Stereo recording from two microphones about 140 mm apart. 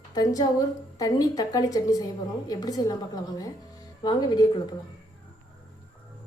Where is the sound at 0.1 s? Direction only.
30° left (ahead or behind).